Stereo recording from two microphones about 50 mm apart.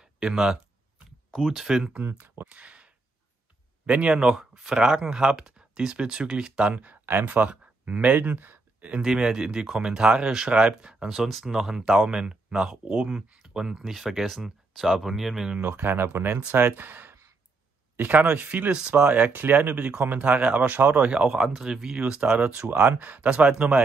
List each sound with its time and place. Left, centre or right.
0.0 s speech: centre
2.0 s speech: right
6.7 s speech: right
8.2 s speech: right
9.0 s speech: centre
11.1 s speech: centre
11.4 s speech: centre
15.6 s speech: right
19.3 s speech: right
21.3 s speech: centre
22.8 s speech: right